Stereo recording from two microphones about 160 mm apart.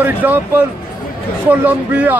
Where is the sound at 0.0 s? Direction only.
10° right (ahead or behind).